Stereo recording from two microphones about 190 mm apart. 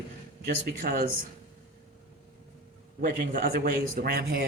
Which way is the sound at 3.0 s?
45° right (ahead or behind).